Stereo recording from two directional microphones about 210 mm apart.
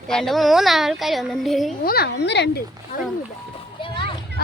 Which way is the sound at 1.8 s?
45° left (ahead or behind).